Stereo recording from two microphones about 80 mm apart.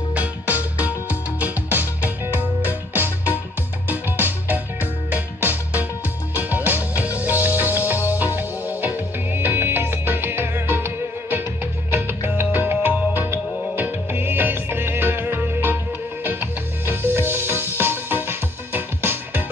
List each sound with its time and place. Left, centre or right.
0.1 s music: centre